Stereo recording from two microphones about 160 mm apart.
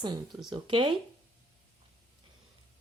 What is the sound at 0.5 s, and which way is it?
Speech, 30° right (ahead or behind).